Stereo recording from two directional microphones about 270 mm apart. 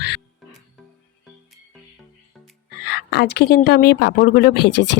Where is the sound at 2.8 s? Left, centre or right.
Left.